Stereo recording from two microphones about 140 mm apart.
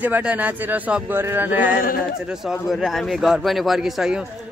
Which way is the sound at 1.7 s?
90° left.